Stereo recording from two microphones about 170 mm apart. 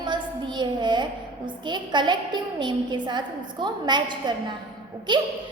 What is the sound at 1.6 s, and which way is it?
A woman's voice, 25° right (ahead or behind).